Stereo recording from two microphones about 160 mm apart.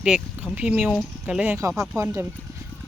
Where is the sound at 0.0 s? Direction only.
5° right (ahead or behind).